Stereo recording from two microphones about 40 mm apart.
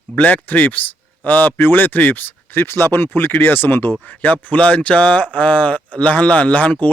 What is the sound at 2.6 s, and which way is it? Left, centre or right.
Speech, left.